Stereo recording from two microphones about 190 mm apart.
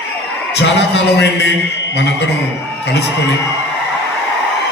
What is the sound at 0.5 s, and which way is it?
A man's voice, 70° left (ahead or behind).